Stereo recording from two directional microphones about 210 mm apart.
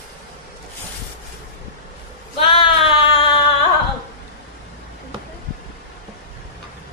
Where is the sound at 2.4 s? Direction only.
25° left (ahead or behind).